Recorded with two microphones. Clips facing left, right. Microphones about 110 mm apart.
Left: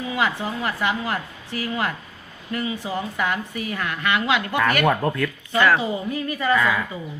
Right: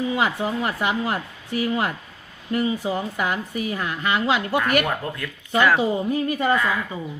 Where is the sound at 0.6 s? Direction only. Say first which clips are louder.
Left 2 dB; 40° right (ahead or behind).